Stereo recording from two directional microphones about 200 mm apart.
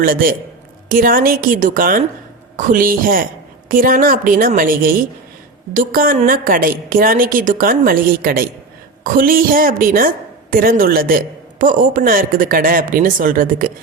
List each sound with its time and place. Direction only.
0.0 s a woman's voice: 45° right (ahead or behind)